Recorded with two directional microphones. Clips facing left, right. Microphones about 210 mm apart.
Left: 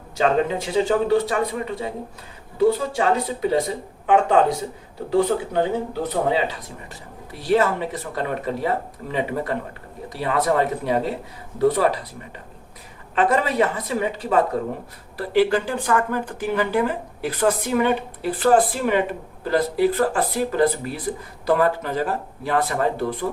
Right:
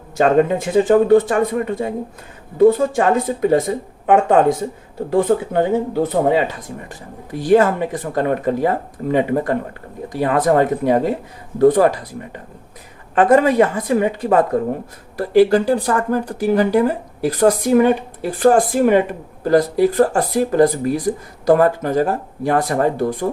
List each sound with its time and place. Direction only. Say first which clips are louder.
0.2 s speech: right 6 dB; 50° right (ahead or behind)
6.0 s speech: right 5 dB; 50° right (ahead or behind)
13.1 s speech: right 7 dB; 50° right (ahead or behind)